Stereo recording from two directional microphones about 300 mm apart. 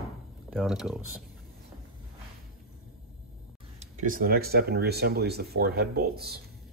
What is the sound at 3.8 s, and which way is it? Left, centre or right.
Speech, right.